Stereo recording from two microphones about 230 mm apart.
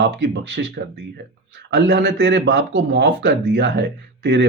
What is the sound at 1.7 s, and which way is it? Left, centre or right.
Speech, right.